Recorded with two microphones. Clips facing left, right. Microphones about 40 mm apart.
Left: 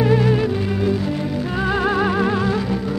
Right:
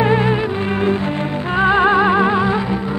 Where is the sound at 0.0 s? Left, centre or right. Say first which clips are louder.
Right 2 dB; right.